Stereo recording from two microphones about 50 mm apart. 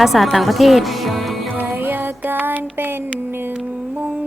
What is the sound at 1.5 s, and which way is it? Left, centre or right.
Music, right.